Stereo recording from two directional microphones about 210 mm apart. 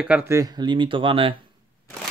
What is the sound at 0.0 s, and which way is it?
Speech, 10° right (ahead or behind).